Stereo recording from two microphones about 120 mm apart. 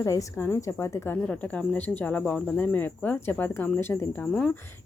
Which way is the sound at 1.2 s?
10° left (ahead or behind).